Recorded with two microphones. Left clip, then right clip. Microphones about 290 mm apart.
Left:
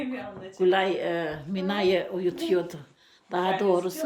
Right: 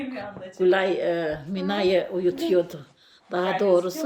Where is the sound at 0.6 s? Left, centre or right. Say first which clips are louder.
Right 2 dB; centre.